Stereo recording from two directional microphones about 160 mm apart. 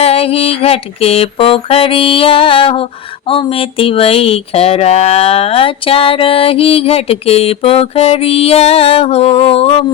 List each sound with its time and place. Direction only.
0.0 s music: 40° left (ahead or behind)